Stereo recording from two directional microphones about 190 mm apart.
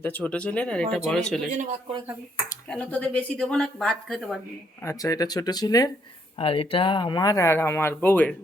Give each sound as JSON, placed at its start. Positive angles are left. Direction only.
{"t": 0.0, "sound": "speech", "side_deg": 10}
{"t": 2.6, "sound": "speech", "side_deg": 5}
{"t": 4.8, "sound": "speech", "side_deg": 15}